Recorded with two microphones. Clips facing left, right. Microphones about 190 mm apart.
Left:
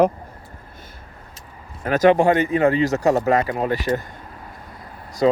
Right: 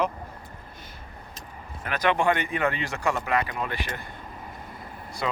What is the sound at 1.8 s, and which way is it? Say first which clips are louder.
Speech: left 9 dB; 40° left (ahead or behind).